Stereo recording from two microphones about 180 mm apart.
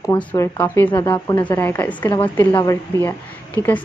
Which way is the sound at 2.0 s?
25° left (ahead or behind).